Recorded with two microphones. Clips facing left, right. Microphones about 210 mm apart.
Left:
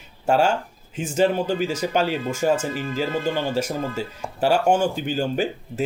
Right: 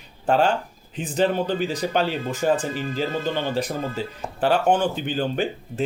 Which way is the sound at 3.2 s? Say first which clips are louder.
Left 1 dB; 10° left (ahead or behind).